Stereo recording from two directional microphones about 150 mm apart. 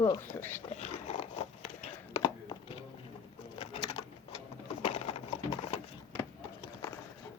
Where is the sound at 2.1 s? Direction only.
25° left (ahead or behind).